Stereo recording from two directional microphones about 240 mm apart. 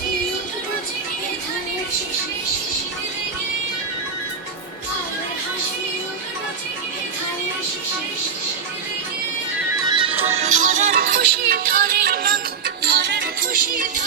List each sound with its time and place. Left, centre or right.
9.9 s music: right